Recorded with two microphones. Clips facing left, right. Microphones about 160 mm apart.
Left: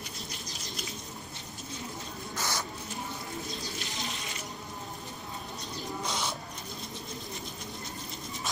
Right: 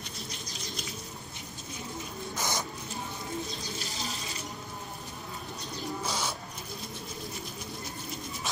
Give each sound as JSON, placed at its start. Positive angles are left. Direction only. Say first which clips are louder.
{"t": 2.3, "sound": "a sound", "louder": "right 1 dB", "side_deg": -20}
{"t": 4.0, "sound": "insect", "louder": "right 1 dB", "side_deg": -40}
{"t": 6.0, "sound": "bird", "louder": "even", "side_deg": 0}